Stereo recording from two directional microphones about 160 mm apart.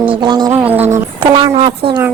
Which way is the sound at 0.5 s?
10° right (ahead or behind).